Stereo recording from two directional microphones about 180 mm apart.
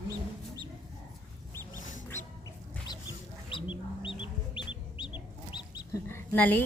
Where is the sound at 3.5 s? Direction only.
30° left (ahead or behind).